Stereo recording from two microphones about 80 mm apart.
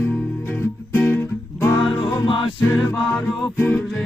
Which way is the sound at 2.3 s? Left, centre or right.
Left.